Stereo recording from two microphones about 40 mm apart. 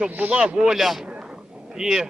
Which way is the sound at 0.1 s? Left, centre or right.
Right.